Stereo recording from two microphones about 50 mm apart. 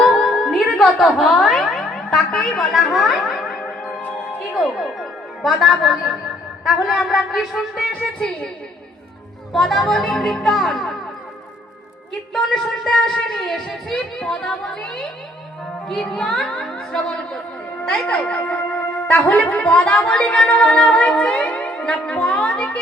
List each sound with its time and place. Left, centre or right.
0.0 s music: centre
4.6 s speech: centre
9.5 s speech: centre
13.3 s speech: centre
13.9 s a woman's voice: centre
17.8 s a woman's voice: left